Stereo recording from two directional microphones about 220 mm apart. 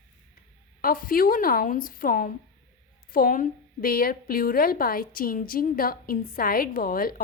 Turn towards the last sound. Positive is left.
turn(degrees=40)  # may be behind; listen again after turning